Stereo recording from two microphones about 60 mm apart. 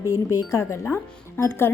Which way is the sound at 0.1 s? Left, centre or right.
Left.